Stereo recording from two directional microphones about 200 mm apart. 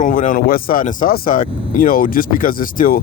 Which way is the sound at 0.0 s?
40° left (ahead or behind).